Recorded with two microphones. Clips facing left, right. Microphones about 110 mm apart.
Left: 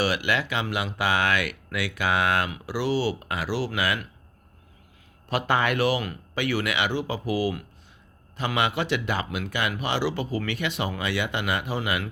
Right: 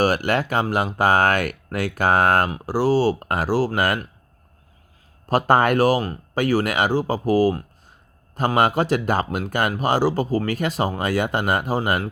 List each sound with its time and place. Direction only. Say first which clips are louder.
0.0 s speech: right 6 dB; 45° right (ahead or behind)
5.3 s speech: right 7 dB; 45° right (ahead or behind)